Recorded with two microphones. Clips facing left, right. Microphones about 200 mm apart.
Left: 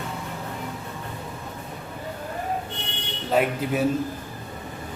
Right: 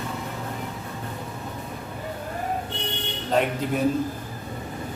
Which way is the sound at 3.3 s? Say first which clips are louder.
Left 1 dB; 5° left (ahead or behind).